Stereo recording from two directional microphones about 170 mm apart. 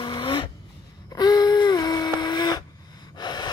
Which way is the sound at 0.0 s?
25° left (ahead or behind).